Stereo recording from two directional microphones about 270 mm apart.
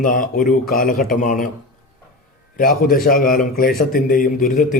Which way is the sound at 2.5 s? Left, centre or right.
Left.